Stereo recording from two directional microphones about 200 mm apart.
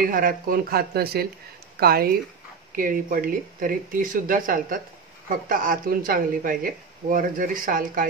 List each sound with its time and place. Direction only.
0.0 s speech: 45° right (ahead or behind)